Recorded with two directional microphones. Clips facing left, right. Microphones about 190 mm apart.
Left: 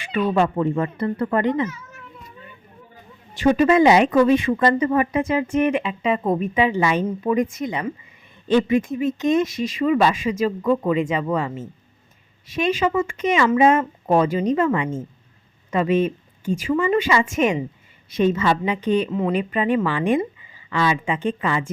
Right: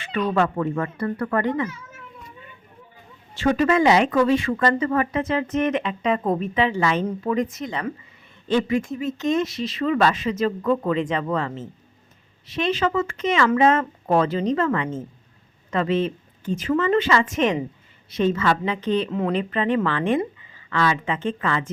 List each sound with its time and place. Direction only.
0.0 s a sound: 10° left (ahead or behind)
0.3 s speech: 20° left (ahead or behind)
3.3 s speech: 15° left (ahead or behind)